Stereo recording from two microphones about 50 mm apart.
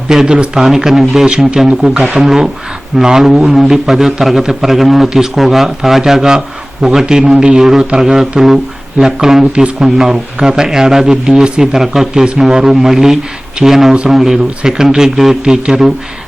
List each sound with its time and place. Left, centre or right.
0.1 s a man's voice: centre
0.6 s a man's voice: centre